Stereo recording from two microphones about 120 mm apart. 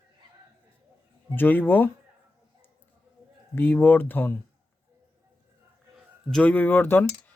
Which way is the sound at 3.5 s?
15° left (ahead or behind).